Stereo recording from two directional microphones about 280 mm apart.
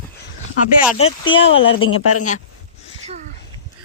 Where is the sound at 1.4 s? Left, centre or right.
Left.